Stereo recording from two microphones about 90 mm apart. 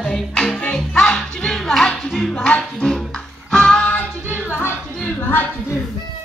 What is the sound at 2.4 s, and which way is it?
Music, 10° left (ahead or behind).